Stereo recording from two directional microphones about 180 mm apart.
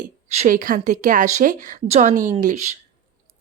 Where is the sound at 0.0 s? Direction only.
40° right (ahead or behind).